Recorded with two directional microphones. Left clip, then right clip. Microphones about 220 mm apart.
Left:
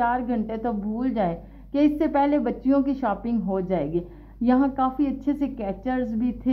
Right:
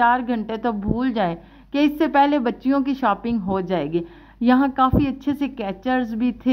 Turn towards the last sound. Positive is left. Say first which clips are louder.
# right 3 dB
turn(degrees=-20)  # may be behind; listen again after turning